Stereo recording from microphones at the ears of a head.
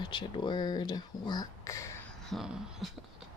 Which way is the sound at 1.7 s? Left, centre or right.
Left.